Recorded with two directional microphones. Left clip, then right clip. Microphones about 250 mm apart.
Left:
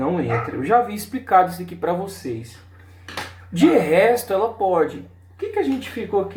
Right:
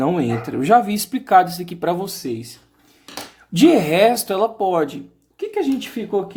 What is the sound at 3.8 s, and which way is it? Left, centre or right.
Speech, right.